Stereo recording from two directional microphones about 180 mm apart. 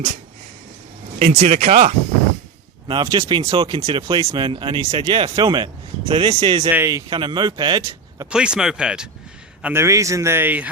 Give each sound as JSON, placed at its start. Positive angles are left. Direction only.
{"t": 1.3, "sound": "speech", "side_deg": -35}
{"t": 2.8, "sound": "speech", "side_deg": -25}
{"t": 8.3, "sound": "a man's voice", "side_deg": -5}